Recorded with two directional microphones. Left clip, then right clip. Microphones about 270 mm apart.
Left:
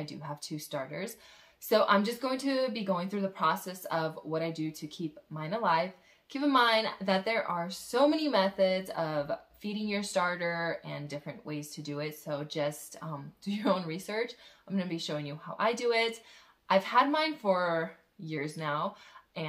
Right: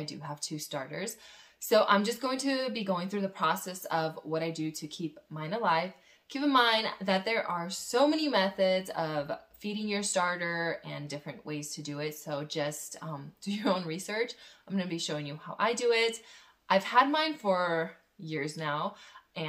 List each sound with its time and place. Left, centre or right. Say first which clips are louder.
0.0 s a woman's voice: right 1 dB; centre